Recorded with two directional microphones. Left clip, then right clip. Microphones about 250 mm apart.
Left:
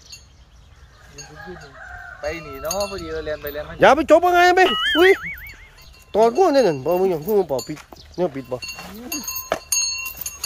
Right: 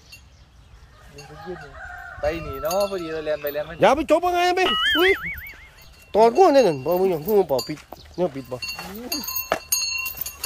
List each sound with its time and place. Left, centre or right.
2.9 s speech: right
3.8 s speech: centre
8.5 s a sound: centre